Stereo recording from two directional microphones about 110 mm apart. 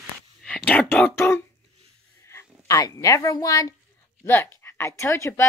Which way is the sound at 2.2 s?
25° left (ahead or behind).